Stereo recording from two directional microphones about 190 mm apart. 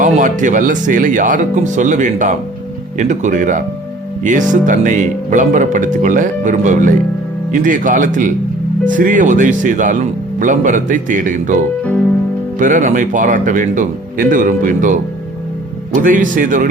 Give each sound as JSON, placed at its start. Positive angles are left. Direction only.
{"t": 0.0, "sound": "speech", "side_deg": -45}
{"t": 16.0, "sound": "speech", "side_deg": -45}